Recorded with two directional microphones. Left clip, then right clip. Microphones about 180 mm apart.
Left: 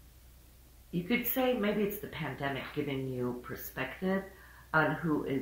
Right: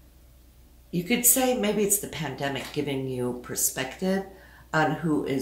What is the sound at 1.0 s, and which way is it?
Speech, 40° right (ahead or behind).